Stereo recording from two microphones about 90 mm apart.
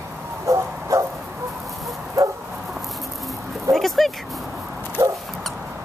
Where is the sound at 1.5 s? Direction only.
5° right (ahead or behind).